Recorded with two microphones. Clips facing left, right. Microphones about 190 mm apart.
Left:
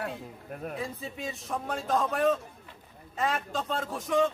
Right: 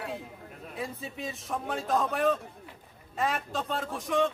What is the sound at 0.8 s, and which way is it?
A man's voice, centre (ahead or behind).